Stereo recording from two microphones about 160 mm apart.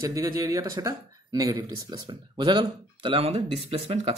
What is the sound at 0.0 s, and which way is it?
Speech, 20° right (ahead or behind).